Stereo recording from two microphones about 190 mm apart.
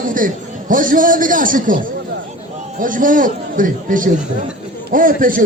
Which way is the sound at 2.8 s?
45° right (ahead or behind).